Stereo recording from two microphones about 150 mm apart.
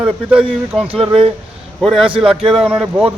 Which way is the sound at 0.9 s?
40° right (ahead or behind).